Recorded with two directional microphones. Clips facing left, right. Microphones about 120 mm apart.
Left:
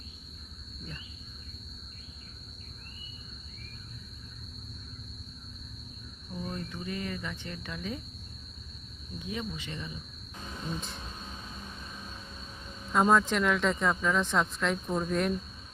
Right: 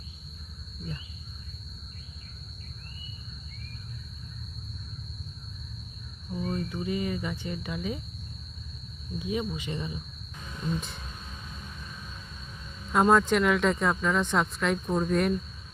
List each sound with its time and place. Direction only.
6.3 s speech: 5° right (ahead or behind)
9.1 s speech: 15° right (ahead or behind)
10.3 s cricket: 30° left (ahead or behind)
10.7 s speech: centre (ahead or behind)
11.0 s a sound: 25° left (ahead or behind)
12.9 s speech: 5° right (ahead or behind)